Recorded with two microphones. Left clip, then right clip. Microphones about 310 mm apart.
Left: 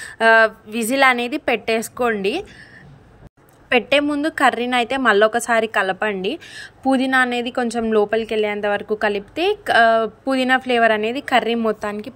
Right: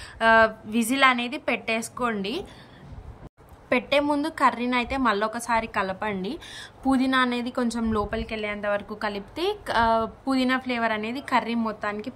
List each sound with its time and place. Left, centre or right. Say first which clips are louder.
0.0 s a woman's voice: left 5 dB; centre
3.6 s a woman's voice: left 6 dB; centre
11.8 s speech: left 4 dB; left